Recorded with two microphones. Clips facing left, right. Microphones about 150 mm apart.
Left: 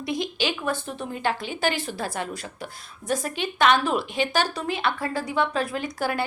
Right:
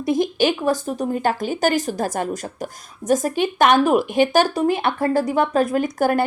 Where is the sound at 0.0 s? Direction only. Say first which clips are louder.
Right 9 dB; 45° right (ahead or behind).